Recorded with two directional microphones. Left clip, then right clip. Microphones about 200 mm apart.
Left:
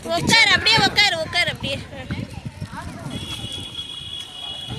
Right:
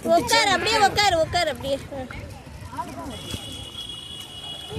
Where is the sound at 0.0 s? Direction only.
50° right (ahead or behind).